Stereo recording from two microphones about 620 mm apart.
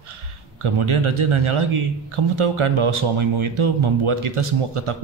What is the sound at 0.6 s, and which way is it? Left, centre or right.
Speech, right.